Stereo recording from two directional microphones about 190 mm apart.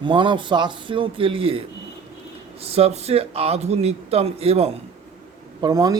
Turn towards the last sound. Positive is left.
turn(degrees=-20)  # may be behind; listen again after turning